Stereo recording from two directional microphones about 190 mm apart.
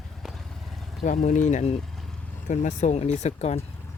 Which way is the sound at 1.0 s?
40° left (ahead or behind).